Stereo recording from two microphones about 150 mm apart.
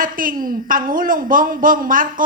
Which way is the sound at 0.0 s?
65° right (ahead or behind).